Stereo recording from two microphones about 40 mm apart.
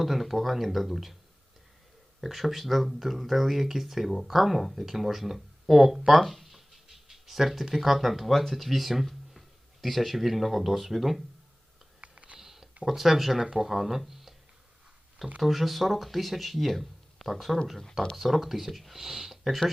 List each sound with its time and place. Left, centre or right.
0.0 s speech: centre
2.2 s speech: centre
11.9 s a sound: right
12.4 s a sound: centre
12.8 s speech: centre
15.4 s speech: centre